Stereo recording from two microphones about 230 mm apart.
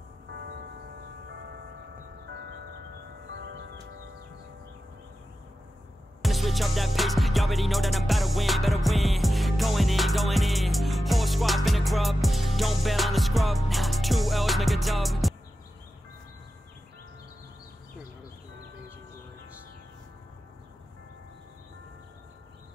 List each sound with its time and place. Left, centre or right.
0.3 s church bell: right
2.2 s a sound: right
3.3 s music: right
6.2 s music: centre